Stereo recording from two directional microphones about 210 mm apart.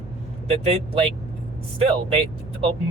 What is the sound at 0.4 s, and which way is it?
Speech, 30° right (ahead or behind).